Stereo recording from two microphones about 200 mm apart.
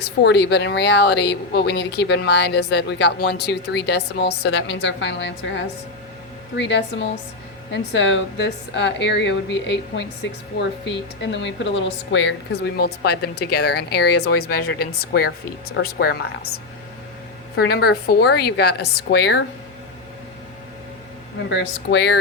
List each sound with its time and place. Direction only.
0.0 s a woman's voice: 55° left (ahead or behind)
17.6 s speech: 50° left (ahead or behind)
21.5 s a woman's voice: 60° left (ahead or behind)